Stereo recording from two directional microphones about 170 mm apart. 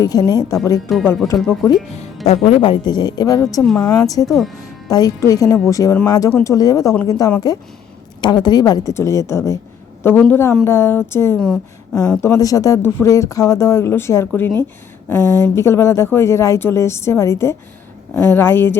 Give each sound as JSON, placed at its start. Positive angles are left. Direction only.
{"t": 0.0, "sound": "a woman's voice", "side_deg": 20}
{"t": 0.9, "sound": "speech", "side_deg": 0}
{"t": 1.5, "sound": "a woman's voice", "side_deg": 20}
{"t": 2.2, "sound": "a woman's voice", "side_deg": 40}
{"t": 4.3, "sound": "speech", "side_deg": 0}
{"t": 4.9, "sound": "a woman's voice", "side_deg": 20}
{"t": 11.3, "sound": "speech", "side_deg": 5}
{"t": 12.2, "sound": "speech", "side_deg": 20}